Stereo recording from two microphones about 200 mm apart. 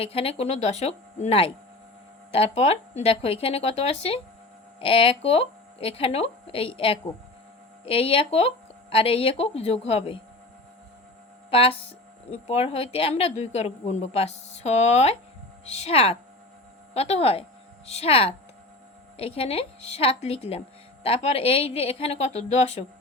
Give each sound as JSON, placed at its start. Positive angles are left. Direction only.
{"t": 0.0, "sound": "a woman's voice", "side_deg": 30}
{"t": 11.5, "sound": "a woman's voice", "side_deg": 30}